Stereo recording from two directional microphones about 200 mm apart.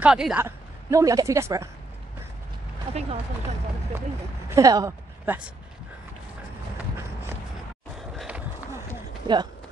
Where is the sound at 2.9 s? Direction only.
30° right (ahead or behind).